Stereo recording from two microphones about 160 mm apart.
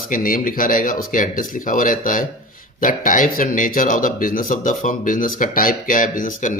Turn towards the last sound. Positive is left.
turn(degrees=55)  # may be behind; listen again after turning